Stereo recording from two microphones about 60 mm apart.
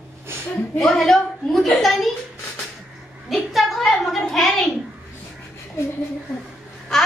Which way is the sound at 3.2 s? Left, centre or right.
Centre.